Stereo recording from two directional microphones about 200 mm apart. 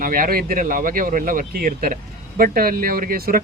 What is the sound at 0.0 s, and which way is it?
Speech, 45° right (ahead or behind).